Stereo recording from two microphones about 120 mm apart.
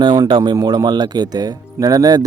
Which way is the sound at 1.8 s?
30° right (ahead or behind).